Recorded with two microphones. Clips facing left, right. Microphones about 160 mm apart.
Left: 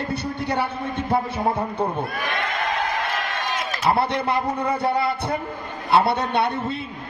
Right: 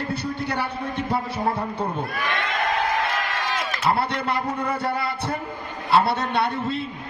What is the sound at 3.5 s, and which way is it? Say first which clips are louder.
A man's voice: left 2 dB; 20° left (ahead or behind).